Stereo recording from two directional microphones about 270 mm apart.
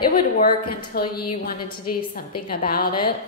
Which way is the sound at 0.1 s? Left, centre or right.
Left.